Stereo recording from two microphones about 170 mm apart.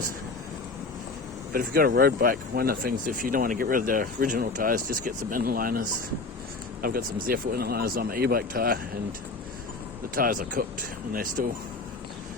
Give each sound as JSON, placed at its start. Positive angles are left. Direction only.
{"t": 1.5, "sound": "speech", "side_deg": -60}
{"t": 10.2, "sound": "speech", "side_deg": -55}